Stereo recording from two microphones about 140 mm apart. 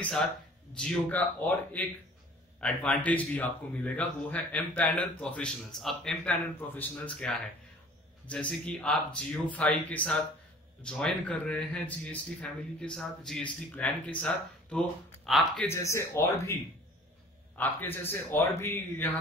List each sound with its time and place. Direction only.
0.7 s a man's voice: 10° left (ahead or behind)
15.7 s speech: 20° left (ahead or behind)
17.6 s a man's voice: 15° left (ahead or behind)